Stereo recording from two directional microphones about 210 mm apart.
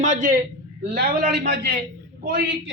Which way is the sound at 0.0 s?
35° right (ahead or behind).